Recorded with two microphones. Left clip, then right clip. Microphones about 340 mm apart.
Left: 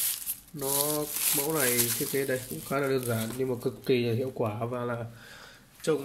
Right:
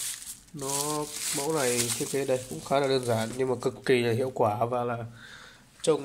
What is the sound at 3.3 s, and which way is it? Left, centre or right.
Speech, right.